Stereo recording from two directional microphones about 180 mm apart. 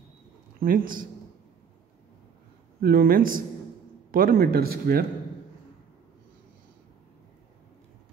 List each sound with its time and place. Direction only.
0.6 s speech: 50° right (ahead or behind)
2.8 s speech: 55° right (ahead or behind)